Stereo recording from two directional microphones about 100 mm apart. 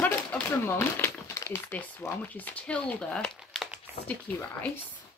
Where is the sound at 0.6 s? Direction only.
25° left (ahead or behind).